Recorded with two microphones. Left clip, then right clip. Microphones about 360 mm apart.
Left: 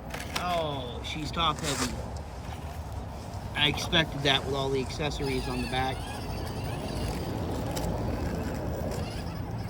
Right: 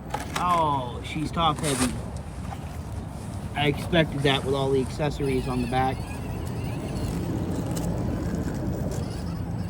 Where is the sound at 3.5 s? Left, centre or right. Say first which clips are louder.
Right 2 dB; centre.